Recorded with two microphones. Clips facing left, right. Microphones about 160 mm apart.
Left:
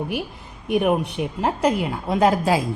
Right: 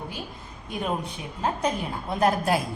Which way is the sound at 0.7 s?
75° left (ahead or behind).